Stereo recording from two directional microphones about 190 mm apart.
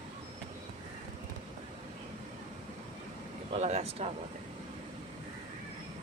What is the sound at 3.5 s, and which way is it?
Speech, 35° right (ahead or behind).